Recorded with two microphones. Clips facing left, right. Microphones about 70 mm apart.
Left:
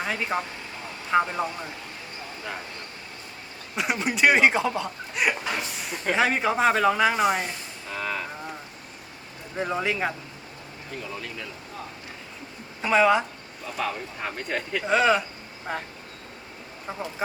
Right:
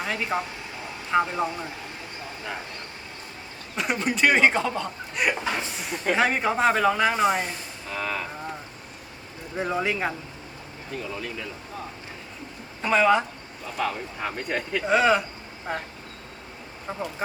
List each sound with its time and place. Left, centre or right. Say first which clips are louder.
0.0 s speech: even; centre
3.8 s speech: even; centre
5.3 s speech: right 2 dB; right
5.9 s speech: right 1 dB; centre
9.6 s speech: even; centre
11.1 s speech: right 2 dB; centre
12.8 s speech: even; centre